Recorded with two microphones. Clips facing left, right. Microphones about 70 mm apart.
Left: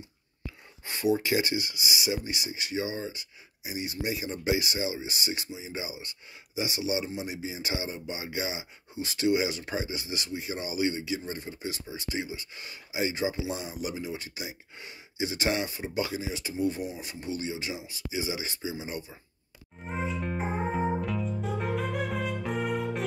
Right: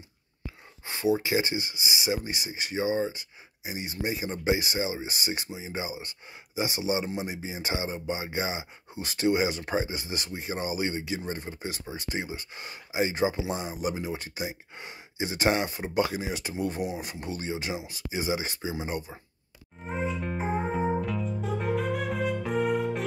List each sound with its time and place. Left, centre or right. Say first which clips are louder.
0.8 s speech: even; right
19.9 s music: right 1 dB; centre